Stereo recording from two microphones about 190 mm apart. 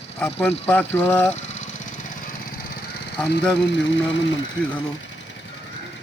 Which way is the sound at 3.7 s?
75° left (ahead or behind).